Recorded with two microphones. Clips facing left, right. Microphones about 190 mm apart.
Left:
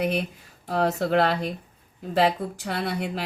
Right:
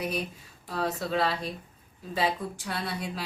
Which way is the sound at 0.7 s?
70° left (ahead or behind).